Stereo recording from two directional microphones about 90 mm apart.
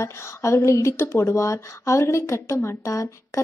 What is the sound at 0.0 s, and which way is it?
Speech, 30° left (ahead or behind).